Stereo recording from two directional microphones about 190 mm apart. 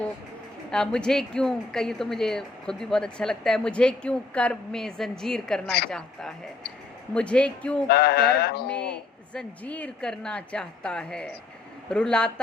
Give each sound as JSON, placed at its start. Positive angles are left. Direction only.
{"t": 0.7, "sound": "a woman's voice", "side_deg": 5}
{"t": 7.1, "sound": "a woman's voice", "side_deg": 5}
{"t": 7.9, "sound": "music", "side_deg": 55}
{"t": 8.7, "sound": "a woman's voice", "side_deg": 5}